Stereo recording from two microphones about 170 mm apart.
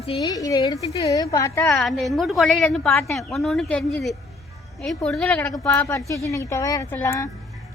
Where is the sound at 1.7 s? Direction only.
Centre (ahead or behind).